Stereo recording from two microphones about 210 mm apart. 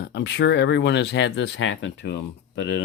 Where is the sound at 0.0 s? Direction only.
55° left (ahead or behind).